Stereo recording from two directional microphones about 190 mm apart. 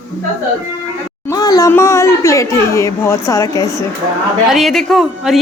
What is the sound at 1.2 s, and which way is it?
Speech, 20° left (ahead or behind).